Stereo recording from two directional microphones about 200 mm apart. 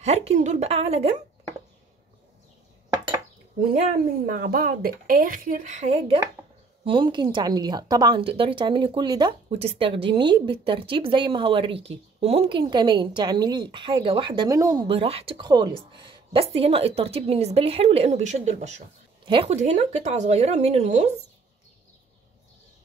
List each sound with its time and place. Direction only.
0.0 s speech: 30° right (ahead or behind)
4.3 s a woman's voice: 45° right (ahead or behind)